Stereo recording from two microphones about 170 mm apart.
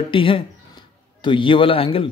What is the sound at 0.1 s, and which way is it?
Speech, 30° left (ahead or behind).